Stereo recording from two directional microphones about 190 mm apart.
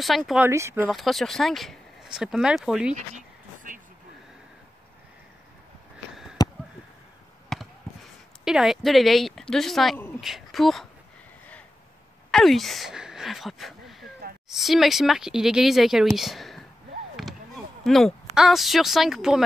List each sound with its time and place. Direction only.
0.0 s speech: centre (ahead or behind)
0.5 s speech: 15° right (ahead or behind)
0.8 s speech: centre (ahead or behind)
6.4 s a sound: 20° left (ahead or behind)
7.5 s basketball bounce: centre (ahead or behind)
8.5 s speech: centre (ahead or behind)
12.3 s speech: centre (ahead or behind)
17.2 s a sound: centre (ahead or behind)
17.8 s speech: centre (ahead or behind)